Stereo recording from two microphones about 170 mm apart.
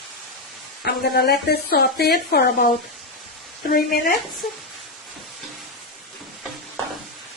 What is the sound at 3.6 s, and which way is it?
Speech, 55° left (ahead or behind).